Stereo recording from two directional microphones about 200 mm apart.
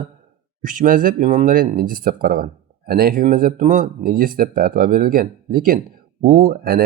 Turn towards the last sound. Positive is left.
turn(degrees=-45)  # may be behind; listen again after turning